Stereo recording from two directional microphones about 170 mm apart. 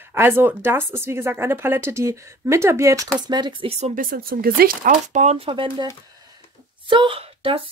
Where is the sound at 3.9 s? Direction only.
60° right (ahead or behind); by 5.8 s 30° right (ahead or behind).